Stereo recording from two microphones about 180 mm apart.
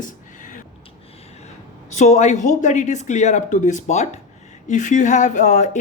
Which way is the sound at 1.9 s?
40° left (ahead or behind).